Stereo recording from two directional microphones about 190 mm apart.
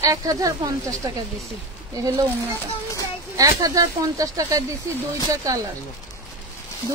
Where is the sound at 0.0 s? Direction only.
20° right (ahead or behind).